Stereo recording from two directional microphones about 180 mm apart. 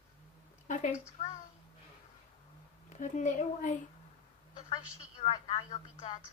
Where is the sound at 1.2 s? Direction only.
35° left (ahead or behind).